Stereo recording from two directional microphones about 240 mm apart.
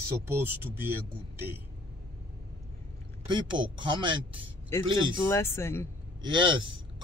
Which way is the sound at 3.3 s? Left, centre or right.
Centre.